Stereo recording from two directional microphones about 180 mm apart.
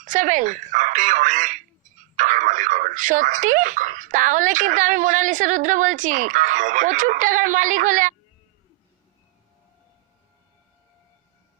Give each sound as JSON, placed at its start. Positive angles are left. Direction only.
{"t": 0.0, "sound": "speech", "side_deg": -45}